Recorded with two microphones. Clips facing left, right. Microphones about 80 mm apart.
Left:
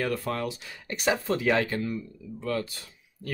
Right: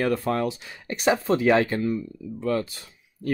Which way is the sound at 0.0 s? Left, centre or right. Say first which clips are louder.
Right 5 dB; right.